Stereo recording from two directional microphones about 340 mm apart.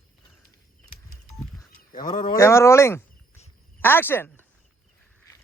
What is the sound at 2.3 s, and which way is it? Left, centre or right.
A man's voice, centre.